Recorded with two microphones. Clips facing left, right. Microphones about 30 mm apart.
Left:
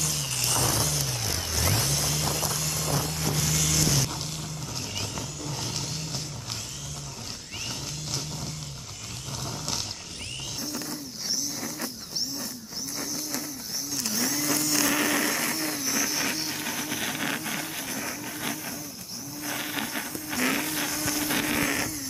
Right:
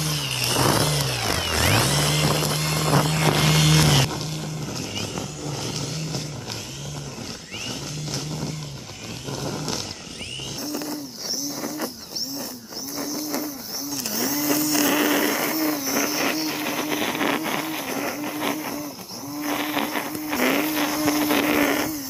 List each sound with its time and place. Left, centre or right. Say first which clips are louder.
0.0 s vehicle: right 5 dB; right
4.1 s vehicle: right 5 dB; centre
7.6 s vehicle: right 4 dB; centre
9.4 s wild animals: right 5 dB; centre
10.6 s a sound: right 6 dB; centre
12.9 s vehicle: right 6 dB; centre
13.9 s blender: right 3 dB; centre
19.4 s vehicle: right 7 dB; centre